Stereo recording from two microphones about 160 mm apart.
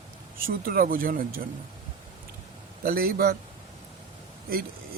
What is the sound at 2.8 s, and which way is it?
Speech, 70° right (ahead or behind).